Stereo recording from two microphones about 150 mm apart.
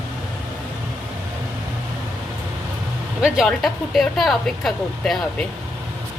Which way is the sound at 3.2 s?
5° right (ahead or behind).